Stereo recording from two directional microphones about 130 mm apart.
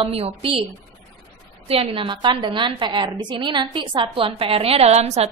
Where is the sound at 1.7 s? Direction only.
45° right (ahead or behind).